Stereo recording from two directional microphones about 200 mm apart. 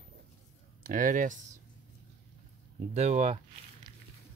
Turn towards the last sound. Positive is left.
turn(degrees=-30)  # may be behind; listen again after turning